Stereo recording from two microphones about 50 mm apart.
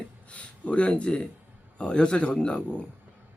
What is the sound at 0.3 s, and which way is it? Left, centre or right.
Speech, left.